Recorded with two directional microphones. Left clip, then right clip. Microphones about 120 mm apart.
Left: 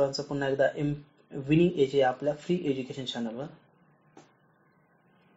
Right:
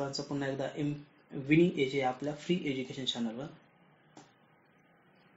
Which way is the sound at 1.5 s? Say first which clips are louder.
Left 3 dB; 20° left (ahead or behind).